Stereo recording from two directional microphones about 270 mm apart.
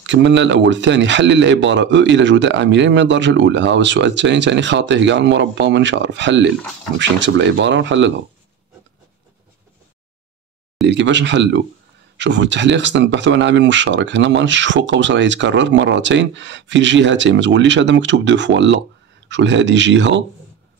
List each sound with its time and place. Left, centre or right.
0.0 s speech: right
10.9 s speech: right